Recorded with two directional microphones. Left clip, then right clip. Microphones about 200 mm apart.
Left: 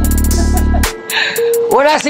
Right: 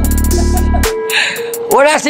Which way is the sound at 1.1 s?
5° right (ahead or behind).